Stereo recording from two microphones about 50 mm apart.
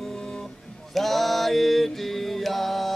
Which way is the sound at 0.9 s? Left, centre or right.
Centre.